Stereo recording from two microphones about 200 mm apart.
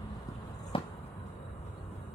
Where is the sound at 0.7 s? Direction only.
25° left (ahead or behind).